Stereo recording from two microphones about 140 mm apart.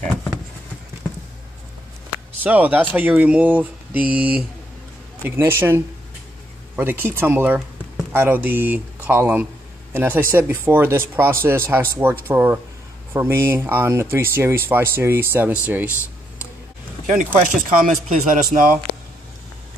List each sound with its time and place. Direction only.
2.4 s speech: 10° right (ahead or behind)
17.0 s speech: 65° right (ahead or behind)